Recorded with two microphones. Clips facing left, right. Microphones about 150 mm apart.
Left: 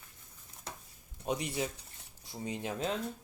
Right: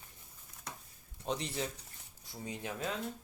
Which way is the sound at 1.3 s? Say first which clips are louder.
Left 3 dB; 15° left (ahead or behind).